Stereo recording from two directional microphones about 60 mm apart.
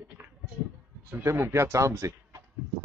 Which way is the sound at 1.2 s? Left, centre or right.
Right.